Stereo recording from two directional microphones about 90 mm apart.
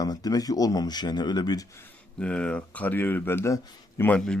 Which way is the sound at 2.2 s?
10° left (ahead or behind).